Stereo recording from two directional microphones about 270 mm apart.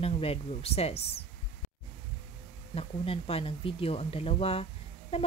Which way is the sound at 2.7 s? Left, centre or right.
Left.